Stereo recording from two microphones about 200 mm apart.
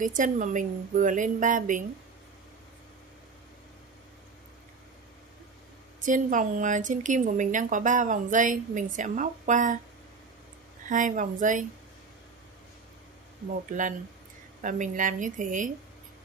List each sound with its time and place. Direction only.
0.0 s a woman's voice: 40° right (ahead or behind)
6.0 s a woman's voice: 40° right (ahead or behind)
10.9 s a woman's voice: 40° right (ahead or behind)
13.7 s a woman's voice: 40° right (ahead or behind)